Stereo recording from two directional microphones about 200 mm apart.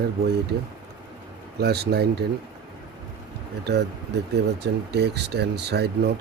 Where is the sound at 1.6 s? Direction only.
55° right (ahead or behind).